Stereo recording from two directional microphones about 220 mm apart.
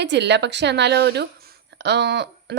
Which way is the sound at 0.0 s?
50° right (ahead or behind).